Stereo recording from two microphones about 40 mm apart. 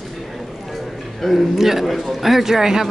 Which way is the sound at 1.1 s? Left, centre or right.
Centre.